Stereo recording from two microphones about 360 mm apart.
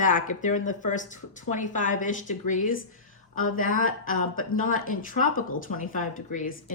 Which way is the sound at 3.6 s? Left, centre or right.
Left.